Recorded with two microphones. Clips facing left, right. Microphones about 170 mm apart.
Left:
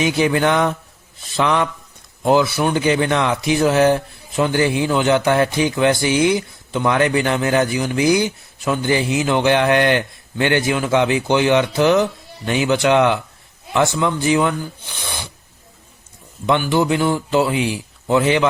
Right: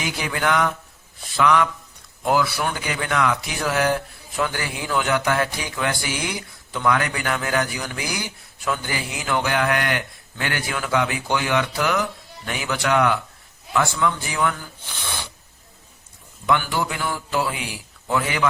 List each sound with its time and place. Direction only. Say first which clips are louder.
0.0 s a man's voice: left 9 dB; 25° left (ahead or behind)
16.5 s a man's voice: left 6 dB; 25° left (ahead or behind)